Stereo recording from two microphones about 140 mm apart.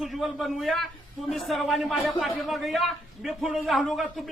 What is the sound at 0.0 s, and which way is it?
A man's voice, centre (ahead or behind).